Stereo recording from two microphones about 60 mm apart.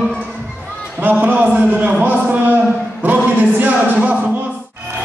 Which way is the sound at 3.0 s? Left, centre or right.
Right.